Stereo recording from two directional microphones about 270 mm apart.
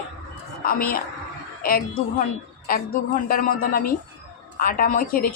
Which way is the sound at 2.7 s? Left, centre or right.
Left.